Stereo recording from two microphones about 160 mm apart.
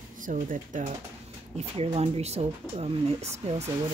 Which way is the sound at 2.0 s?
40° right (ahead or behind).